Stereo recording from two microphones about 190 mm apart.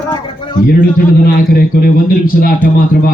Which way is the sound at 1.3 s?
55° left (ahead or behind).